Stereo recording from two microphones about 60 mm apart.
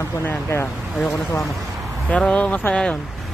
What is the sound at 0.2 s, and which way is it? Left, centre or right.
Speech, left.